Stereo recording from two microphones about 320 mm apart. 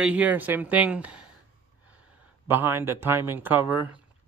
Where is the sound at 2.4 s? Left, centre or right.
Centre.